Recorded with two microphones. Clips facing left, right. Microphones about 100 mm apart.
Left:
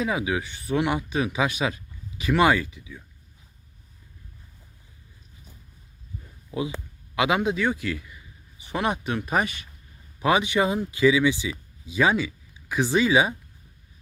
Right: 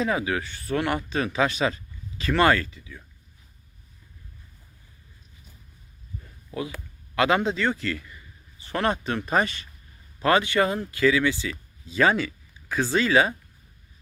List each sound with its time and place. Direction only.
0.0 s speech: 10° left (ahead or behind)
6.5 s speech: 15° left (ahead or behind)